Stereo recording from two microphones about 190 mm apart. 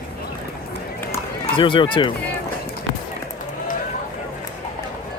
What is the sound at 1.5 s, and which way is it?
Speech, 25° left (ahead or behind).